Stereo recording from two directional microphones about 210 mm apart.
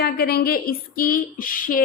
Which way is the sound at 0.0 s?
50° left (ahead or behind).